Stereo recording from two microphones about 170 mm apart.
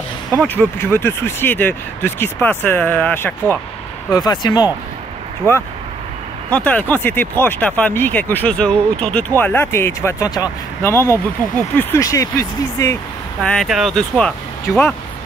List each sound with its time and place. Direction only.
0.4 s speech: 10° left (ahead or behind)
4.1 s speech: 25° left (ahead or behind)
6.5 s speech: 10° left (ahead or behind)
13.4 s speech: 5° left (ahead or behind)